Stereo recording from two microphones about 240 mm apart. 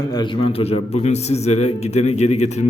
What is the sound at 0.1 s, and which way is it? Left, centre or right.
A man's voice, left.